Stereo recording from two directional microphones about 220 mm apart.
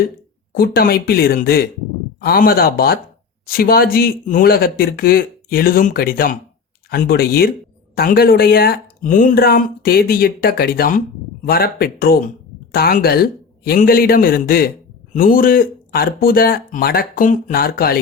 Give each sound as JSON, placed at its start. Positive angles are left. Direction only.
{"t": 0.5, "sound": "speech", "side_deg": 45}